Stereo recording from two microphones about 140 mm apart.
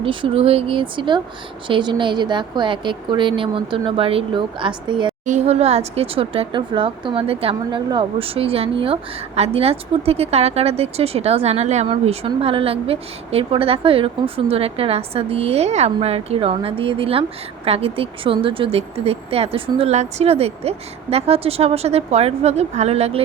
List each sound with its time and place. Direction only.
0.0 s a woman's voice: 40° right (ahead or behind)
5.2 s a woman's voice: 55° right (ahead or behind)